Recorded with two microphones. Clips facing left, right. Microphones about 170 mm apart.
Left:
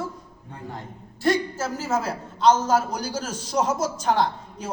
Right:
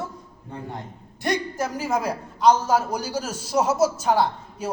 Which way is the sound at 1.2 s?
15° right (ahead or behind).